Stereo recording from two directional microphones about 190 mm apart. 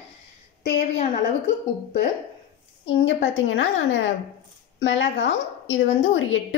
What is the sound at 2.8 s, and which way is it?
A woman's voice, 80° left.